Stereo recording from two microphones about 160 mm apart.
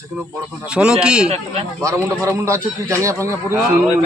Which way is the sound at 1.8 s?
20° right (ahead or behind).